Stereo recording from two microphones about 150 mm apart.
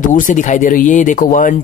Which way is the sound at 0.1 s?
60° left (ahead or behind).